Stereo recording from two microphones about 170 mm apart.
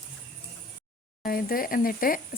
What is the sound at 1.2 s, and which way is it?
Speech, 60° left (ahead or behind).